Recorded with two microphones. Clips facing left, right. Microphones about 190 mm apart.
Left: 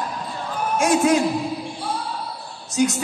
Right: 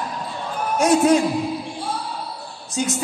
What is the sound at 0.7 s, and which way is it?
Speech, 35° right (ahead or behind).